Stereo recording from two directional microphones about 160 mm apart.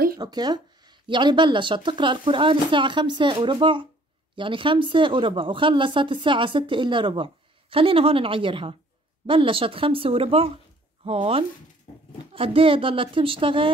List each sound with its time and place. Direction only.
0.2 s speech: 25° right (ahead or behind)